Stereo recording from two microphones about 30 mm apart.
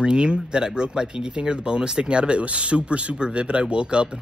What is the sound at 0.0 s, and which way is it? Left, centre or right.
Speech, right.